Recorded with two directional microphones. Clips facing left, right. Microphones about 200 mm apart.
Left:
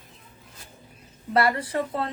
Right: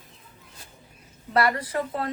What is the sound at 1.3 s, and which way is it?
Speech, 25° left (ahead or behind).